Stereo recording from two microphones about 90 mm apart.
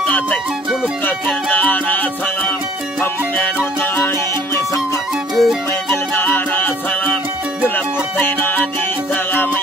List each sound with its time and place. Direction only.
0.0 s music: 15° left (ahead or behind)
1.5 s music: 20° left (ahead or behind)
3.8 s music: 25° left (ahead or behind)
5.3 s music: centre (ahead or behind)
6.1 s music: 20° left (ahead or behind)
7.7 s music: 20° left (ahead or behind)